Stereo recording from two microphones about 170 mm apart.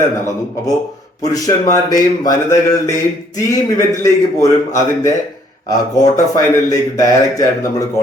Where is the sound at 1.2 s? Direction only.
20° left (ahead or behind).